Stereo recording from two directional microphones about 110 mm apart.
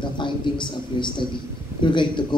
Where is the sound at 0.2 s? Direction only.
45° left (ahead or behind).